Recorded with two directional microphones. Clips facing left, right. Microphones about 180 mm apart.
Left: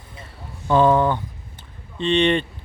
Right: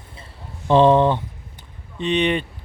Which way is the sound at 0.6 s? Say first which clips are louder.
Right 2 dB; 25° right (ahead or behind).